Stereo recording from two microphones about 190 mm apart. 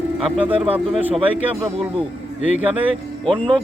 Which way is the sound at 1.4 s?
30° right (ahead or behind).